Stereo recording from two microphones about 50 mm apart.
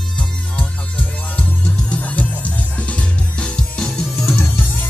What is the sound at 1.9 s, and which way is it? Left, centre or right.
Music, left.